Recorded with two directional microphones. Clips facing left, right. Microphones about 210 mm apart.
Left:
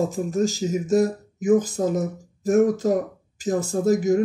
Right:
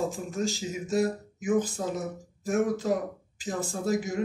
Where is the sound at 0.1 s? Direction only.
40° left (ahead or behind).